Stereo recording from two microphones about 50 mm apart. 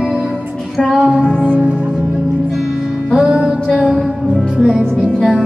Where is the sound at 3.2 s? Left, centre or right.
Centre.